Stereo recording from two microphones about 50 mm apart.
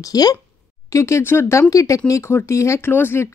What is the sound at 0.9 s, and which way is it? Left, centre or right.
Speech, left.